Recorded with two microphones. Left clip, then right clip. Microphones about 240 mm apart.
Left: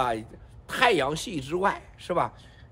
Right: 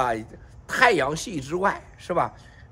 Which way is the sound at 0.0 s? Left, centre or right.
Centre.